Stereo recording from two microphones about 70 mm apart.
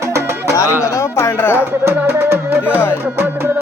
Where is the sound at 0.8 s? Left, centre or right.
Left.